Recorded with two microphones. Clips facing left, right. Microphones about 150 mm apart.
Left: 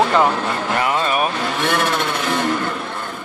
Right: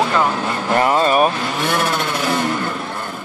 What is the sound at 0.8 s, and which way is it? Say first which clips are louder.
Vehicle: right 6 dB; 40° right (ahead or behind).